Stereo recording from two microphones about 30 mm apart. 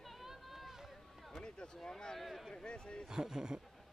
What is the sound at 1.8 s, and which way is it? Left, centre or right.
Speech, left.